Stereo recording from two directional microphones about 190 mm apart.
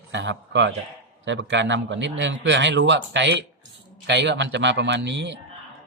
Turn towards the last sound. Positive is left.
turn(degrees=-65)  # may be behind; listen again after turning